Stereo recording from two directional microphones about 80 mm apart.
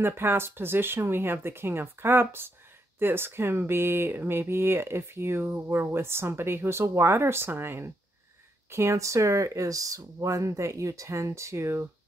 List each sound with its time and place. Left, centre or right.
0.0 s speech: right